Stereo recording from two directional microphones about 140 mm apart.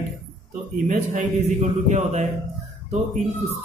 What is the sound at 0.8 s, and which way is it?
A man's voice, 65° right (ahead or behind).